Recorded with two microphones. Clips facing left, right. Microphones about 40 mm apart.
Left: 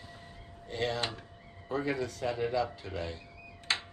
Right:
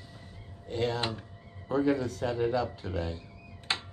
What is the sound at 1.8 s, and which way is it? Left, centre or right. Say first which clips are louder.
Speech: right 6 dB; left.